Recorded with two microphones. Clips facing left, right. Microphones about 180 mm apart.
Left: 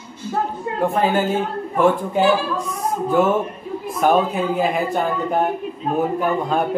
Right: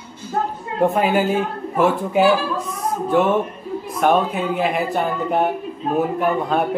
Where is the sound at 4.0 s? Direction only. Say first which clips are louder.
Left 1 dB; centre (ahead or behind).